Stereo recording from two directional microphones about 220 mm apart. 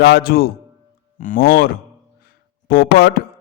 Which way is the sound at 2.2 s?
40° left (ahead or behind).